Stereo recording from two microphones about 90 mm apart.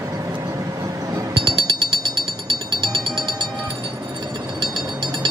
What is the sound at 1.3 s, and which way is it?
Music, 60° right (ahead or behind).